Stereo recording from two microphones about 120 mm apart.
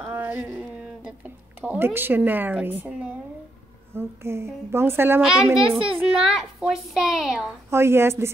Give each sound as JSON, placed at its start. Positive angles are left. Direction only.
{"t": 0.0, "sound": "a woman's voice", "side_deg": -15}
{"t": 5.2, "sound": "a child's voice", "side_deg": -5}
{"t": 7.7, "sound": "a woman's voice", "side_deg": -20}